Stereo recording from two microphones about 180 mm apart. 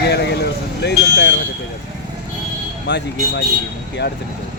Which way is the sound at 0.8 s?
70° left (ahead or behind).